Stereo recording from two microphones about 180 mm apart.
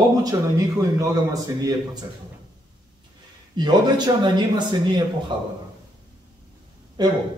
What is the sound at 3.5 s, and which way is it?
A man's voice, 25° right (ahead or behind).